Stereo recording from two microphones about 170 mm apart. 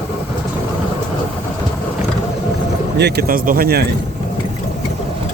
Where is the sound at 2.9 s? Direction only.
75° right (ahead or behind).